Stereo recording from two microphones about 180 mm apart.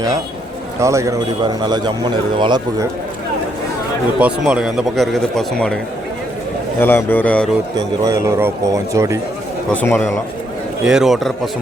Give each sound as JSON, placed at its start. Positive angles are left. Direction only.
{"t": 0.8, "sound": "speech", "side_deg": -15}
{"t": 4.2, "sound": "speech", "side_deg": -5}
{"t": 6.7, "sound": "a man's voice", "side_deg": 10}
{"t": 7.8, "sound": "speech", "side_deg": -20}
{"t": 9.6, "sound": "a man's voice", "side_deg": 10}
{"t": 10.8, "sound": "speech", "side_deg": -5}